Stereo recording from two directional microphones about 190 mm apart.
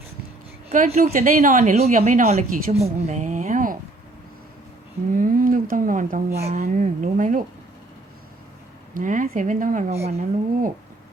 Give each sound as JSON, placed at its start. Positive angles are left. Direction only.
{"t": 0.7, "sound": "a woman's voice", "side_deg": -40}
{"t": 5.1, "sound": "speech", "side_deg": -45}
{"t": 9.0, "sound": "speech", "side_deg": -45}